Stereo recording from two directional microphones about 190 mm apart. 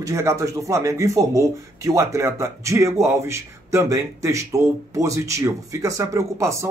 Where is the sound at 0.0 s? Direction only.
15° right (ahead or behind).